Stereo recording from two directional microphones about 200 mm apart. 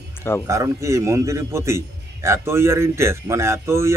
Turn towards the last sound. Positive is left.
turn(degrees=-15)  # may be behind; listen again after turning